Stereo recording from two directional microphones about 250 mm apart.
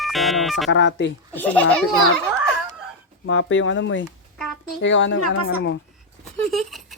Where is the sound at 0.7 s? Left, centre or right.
Left.